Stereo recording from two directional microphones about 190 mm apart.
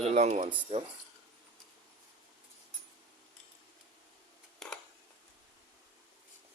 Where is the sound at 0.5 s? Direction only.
30° right (ahead or behind).